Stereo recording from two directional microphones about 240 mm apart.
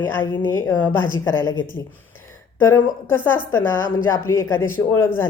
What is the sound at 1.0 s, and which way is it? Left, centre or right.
Speech, left.